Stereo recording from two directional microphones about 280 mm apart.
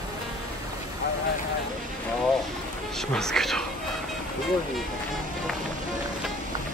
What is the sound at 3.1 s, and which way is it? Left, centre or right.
Speech, centre.